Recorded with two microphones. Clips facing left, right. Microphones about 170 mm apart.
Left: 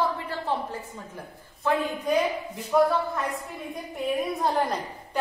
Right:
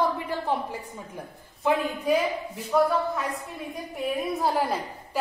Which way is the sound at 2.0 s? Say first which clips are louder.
Right 1 dB; centre (ahead or behind).